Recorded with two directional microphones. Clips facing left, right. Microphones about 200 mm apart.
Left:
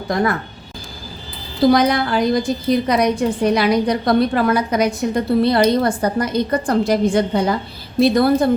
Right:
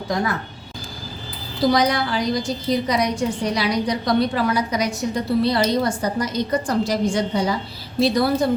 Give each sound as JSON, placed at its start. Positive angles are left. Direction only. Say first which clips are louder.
{"t": 0.1, "sound": "a woman's voice", "louder": "left 5 dB", "side_deg": 60}
{"t": 1.7, "sound": "a woman's voice", "louder": "left 4 dB", "side_deg": 55}